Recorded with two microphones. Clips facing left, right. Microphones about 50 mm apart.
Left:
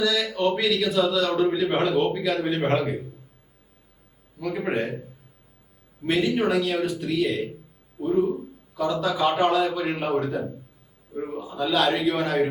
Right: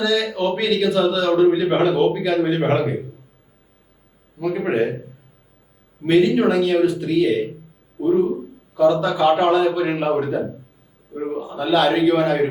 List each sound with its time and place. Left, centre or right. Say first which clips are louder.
0.0 s a man's voice: right 3 dB; centre
4.4 s a man's voice: right 6 dB; centre
6.1 s a man's voice: right 7 dB; centre
11.1 s a man's voice: right 5 dB; centre
11.3 s a man's voice: right 5 dB; centre